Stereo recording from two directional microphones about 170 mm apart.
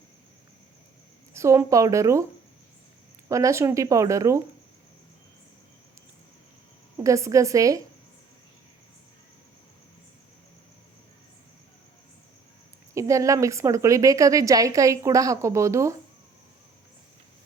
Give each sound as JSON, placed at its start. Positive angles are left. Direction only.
{"t": 1.3, "sound": "a woman's voice", "side_deg": -15}
{"t": 3.2, "sound": "a woman's voice", "side_deg": -20}
{"t": 7.0, "sound": "a woman's voice", "side_deg": -20}
{"t": 12.9, "sound": "a woman's voice", "side_deg": -20}